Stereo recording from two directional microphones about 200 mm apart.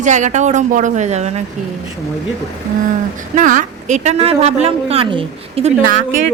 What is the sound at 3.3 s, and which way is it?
Speech, 40° right (ahead or behind).